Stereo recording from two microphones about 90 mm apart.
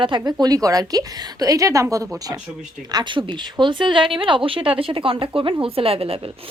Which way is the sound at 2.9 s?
50° right (ahead or behind).